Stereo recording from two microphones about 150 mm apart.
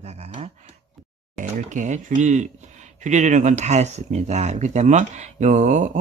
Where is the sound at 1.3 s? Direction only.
60° right (ahead or behind).